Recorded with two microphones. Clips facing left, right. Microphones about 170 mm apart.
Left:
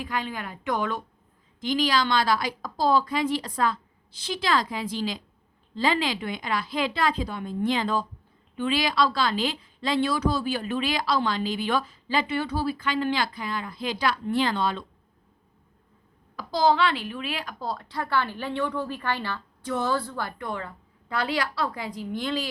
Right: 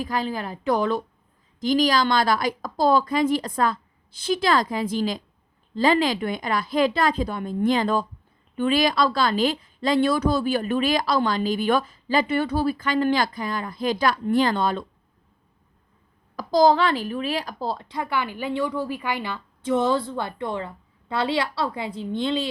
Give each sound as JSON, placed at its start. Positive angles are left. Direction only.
{"t": 0.0, "sound": "a woman's voice", "side_deg": -35}
{"t": 16.3, "sound": "speech", "side_deg": -40}